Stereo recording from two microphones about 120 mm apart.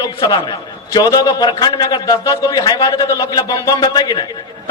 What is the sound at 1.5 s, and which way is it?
A man's voice, 40° left (ahead or behind).